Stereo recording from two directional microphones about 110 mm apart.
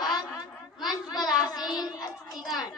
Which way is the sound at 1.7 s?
35° left (ahead or behind).